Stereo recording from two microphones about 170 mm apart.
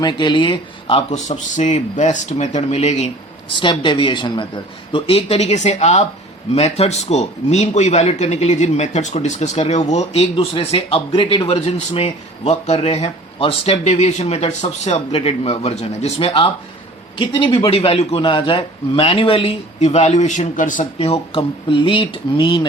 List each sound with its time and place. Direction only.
0.0 s a man's voice: 25° left (ahead or behind)
3.5 s a man's voice: 30° left (ahead or behind); by 21.1 s 50° left (ahead or behind)
21.1 s a man's voice: 30° left (ahead or behind)